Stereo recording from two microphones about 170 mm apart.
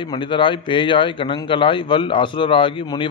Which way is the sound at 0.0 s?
30° left (ahead or behind).